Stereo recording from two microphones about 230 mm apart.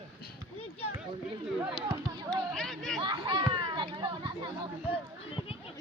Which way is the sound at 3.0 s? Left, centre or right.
Right.